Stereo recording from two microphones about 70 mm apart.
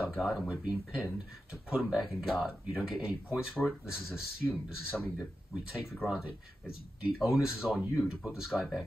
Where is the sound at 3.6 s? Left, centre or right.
Centre.